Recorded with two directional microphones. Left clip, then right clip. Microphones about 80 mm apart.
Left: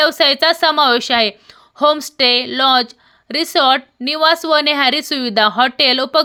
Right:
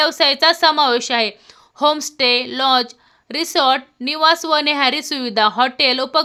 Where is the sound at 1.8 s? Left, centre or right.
Left.